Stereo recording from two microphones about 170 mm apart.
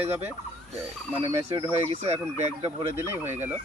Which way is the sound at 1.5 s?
35° right (ahead or behind).